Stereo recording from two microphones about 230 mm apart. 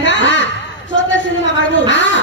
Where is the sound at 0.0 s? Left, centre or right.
Left.